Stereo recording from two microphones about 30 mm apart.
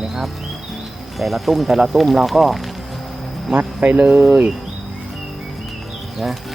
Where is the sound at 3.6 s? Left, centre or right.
Right.